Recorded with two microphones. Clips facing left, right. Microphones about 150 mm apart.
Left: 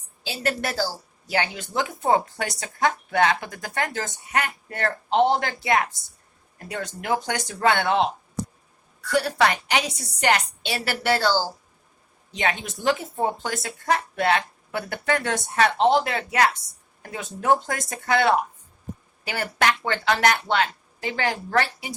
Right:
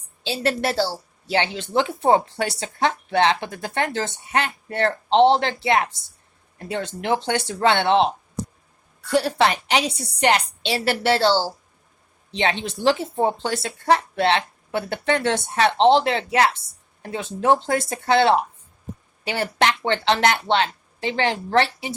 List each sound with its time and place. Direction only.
0.2 s a woman's voice: 30° right (ahead or behind)